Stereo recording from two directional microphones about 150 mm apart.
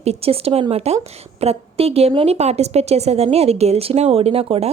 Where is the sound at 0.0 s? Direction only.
45° right (ahead or behind).